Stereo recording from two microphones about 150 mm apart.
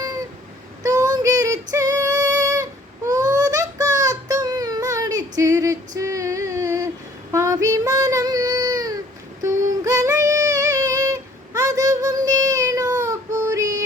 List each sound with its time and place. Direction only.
0.8 s female singing: 25° right (ahead or behind)
3.1 s child singing: 25° right (ahead or behind)